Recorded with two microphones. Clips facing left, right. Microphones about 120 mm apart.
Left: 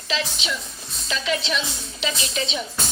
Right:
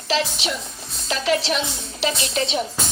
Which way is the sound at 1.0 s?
55° right (ahead or behind).